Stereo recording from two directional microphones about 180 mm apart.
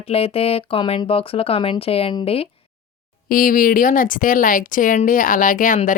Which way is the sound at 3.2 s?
50° left (ahead or behind).